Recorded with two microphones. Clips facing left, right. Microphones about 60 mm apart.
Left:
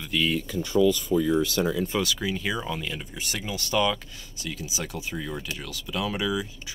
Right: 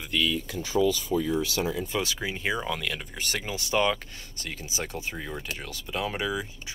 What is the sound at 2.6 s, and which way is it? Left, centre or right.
Speech, right.